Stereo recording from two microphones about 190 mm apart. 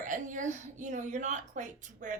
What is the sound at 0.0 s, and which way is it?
A woman's voice, 40° right (ahead or behind).